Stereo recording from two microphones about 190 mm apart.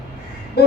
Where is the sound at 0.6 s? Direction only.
60° left (ahead or behind).